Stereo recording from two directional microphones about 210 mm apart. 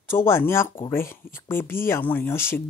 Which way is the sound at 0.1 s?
10° left (ahead or behind).